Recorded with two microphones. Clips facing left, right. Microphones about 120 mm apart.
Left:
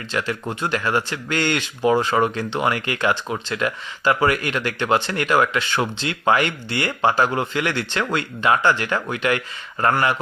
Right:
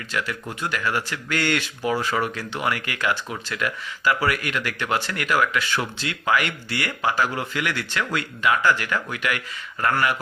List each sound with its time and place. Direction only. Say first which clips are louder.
0.1 s speech: left 4 dB; 30° left (ahead or behind)